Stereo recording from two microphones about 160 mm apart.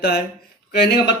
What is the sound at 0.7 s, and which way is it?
Speech, 90° left.